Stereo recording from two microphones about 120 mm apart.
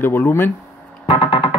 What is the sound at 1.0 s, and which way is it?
Synthesizer, 50° left (ahead or behind).